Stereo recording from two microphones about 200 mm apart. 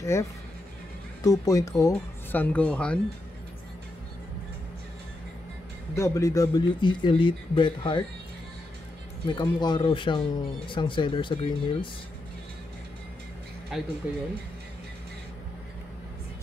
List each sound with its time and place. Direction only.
0.0 s speech: 15° left (ahead or behind)
5.9 s speech: 15° left (ahead or behind)
9.3 s speech: 20° left (ahead or behind)
13.7 s speech: centre (ahead or behind)